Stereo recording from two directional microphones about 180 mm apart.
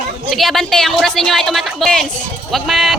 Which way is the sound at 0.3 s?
Centre (ahead or behind).